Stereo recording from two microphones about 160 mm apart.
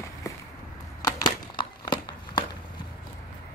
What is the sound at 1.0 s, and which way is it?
Crumpling, 25° left (ahead or behind).